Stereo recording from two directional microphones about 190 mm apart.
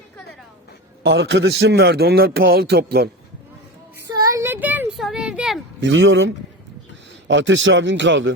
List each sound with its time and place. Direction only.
1.0 s a man's voice: 65° right (ahead or behind)
4.0 s a sound: 15° right (ahead or behind)
5.8 s a man's voice: 80° right